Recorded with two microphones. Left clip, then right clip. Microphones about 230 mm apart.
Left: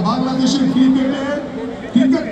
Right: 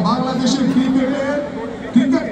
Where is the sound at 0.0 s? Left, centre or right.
Left.